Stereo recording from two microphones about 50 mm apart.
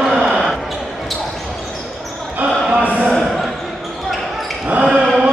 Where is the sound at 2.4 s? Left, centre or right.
Right.